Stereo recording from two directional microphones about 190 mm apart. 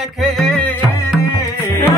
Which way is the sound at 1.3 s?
20° left (ahead or behind).